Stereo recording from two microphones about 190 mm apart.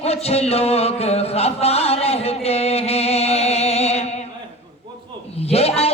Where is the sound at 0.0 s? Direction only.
30° left (ahead or behind).